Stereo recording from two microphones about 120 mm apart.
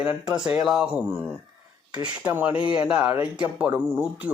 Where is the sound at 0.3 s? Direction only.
5° right (ahead or behind).